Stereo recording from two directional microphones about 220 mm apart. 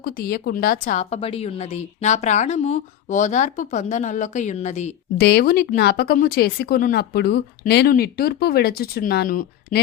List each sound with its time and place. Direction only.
0.0 s a woman's voice: 45° left (ahead or behind)
5.1 s speech: 45° left (ahead or behind)